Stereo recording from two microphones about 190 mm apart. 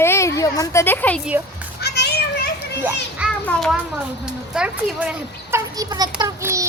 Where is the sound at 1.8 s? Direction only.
60° left (ahead or behind).